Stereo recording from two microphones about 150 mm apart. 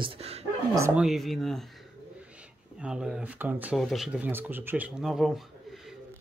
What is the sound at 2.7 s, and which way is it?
Speech, 5° right (ahead or behind).